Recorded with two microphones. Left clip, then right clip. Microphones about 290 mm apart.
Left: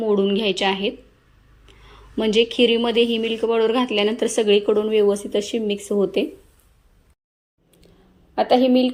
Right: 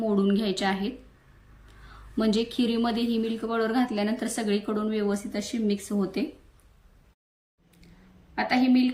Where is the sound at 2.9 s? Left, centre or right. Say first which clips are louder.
Left 11 dB; centre.